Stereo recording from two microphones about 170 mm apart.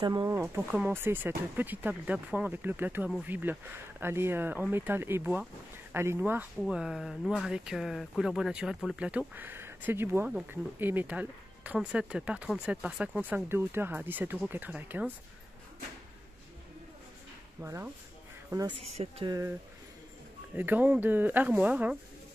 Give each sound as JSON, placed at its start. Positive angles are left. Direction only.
{"t": 0.0, "sound": "speech", "side_deg": -25}
{"t": 0.6, "sound": "speech", "side_deg": -10}
{"t": 17.6, "sound": "speech", "side_deg": -15}
{"t": 18.8, "sound": "speech", "side_deg": -35}
{"t": 20.5, "sound": "speech", "side_deg": -10}